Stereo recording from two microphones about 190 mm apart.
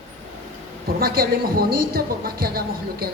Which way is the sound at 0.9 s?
50° right (ahead or behind).